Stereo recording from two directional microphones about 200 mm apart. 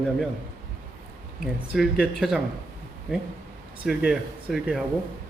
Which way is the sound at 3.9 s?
Centre (ahead or behind).